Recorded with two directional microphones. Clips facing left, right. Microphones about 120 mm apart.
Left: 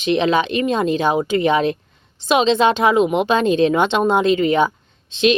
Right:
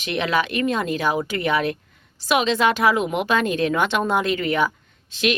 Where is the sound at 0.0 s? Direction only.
25° left (ahead or behind).